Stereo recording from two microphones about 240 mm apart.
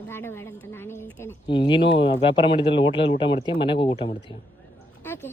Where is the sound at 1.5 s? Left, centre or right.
Left.